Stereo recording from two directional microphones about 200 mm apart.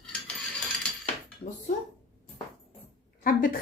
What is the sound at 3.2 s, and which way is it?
Speech, 45° left (ahead or behind).